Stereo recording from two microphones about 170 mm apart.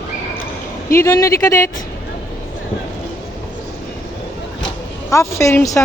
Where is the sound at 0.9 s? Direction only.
15° left (ahead or behind).